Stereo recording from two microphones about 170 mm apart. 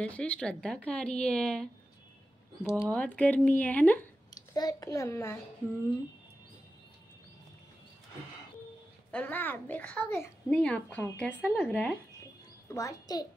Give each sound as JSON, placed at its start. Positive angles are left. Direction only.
{"t": 0.0, "sound": "a woman's voice", "side_deg": 5}
{"t": 4.6, "sound": "a child's voice", "side_deg": 20}
{"t": 9.1, "sound": "a child's voice", "side_deg": 10}
{"t": 12.6, "sound": "a child's voice", "side_deg": 20}